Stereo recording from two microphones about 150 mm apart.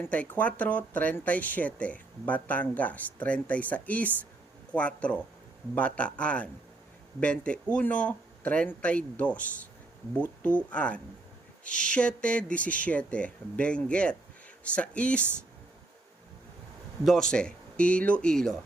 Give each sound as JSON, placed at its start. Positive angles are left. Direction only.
{"t": 0.0, "sound": "speech", "side_deg": 10}
{"t": 17.1, "sound": "speech", "side_deg": 5}